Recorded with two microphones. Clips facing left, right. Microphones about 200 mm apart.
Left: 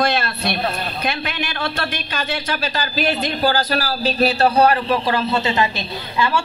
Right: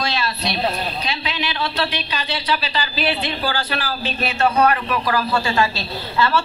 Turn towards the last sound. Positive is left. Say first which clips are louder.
# right 1 dB
turn(degrees=15)  # may be behind; listen again after turning